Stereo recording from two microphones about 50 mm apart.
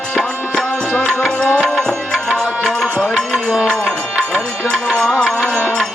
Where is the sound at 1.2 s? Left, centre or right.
Centre.